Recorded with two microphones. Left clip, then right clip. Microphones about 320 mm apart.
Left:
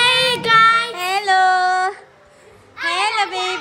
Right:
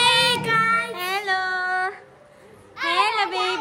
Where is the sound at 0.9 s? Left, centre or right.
Centre.